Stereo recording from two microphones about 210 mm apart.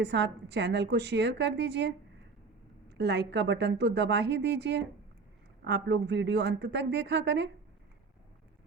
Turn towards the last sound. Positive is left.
turn(degrees=-55)  # may be behind; listen again after turning